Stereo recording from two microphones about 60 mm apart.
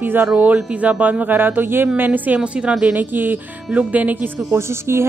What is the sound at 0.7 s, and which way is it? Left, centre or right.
Speech, right.